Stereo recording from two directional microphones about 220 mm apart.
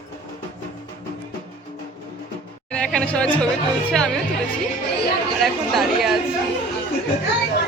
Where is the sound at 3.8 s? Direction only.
5° left (ahead or behind).